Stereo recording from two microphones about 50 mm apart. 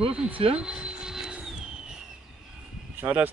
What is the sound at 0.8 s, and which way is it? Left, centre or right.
Vehicle, centre.